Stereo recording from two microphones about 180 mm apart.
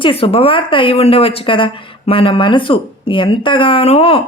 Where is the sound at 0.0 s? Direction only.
30° left (ahead or behind).